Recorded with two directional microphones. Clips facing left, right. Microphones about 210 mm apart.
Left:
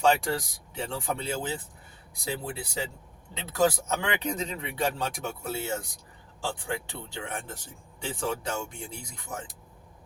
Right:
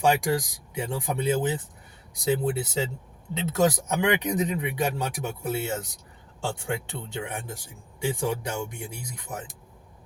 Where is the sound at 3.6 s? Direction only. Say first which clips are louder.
Right 2 dB; 15° right (ahead or behind).